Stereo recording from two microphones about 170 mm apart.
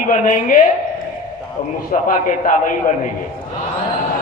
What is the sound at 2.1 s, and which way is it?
Speech, 50° left (ahead or behind).